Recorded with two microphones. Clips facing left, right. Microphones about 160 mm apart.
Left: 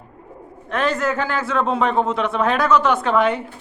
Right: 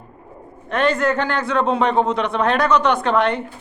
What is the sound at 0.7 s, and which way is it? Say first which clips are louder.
Speech: right 3 dB; centre (ahead or behind).